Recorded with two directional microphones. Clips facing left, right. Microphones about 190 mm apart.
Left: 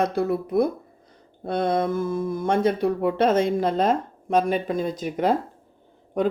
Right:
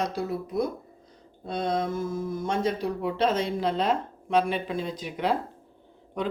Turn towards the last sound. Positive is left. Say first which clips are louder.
# left 7 dB
turn(degrees=50)  # may be behind; listen again after turning